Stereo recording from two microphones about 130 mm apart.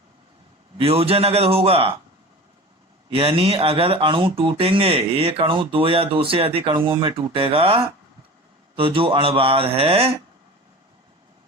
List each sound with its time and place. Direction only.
0.8 s speech: 50° right (ahead or behind)
3.1 s speech: 45° right (ahead or behind)